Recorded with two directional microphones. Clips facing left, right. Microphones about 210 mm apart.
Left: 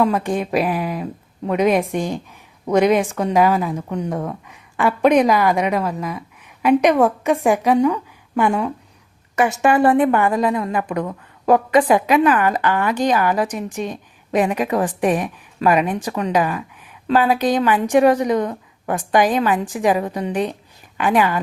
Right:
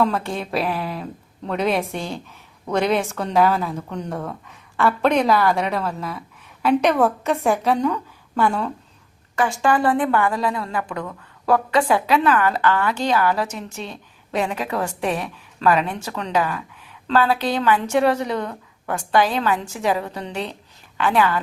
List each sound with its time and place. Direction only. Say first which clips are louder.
0.0 s a woman's voice: left 3 dB; 15° left (ahead or behind)